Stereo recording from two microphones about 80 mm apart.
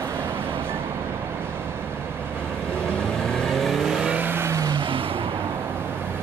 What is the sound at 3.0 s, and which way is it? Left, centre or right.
Vehicle, centre.